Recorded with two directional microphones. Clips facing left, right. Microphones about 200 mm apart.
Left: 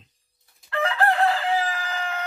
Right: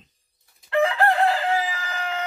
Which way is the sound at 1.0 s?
25° right (ahead or behind).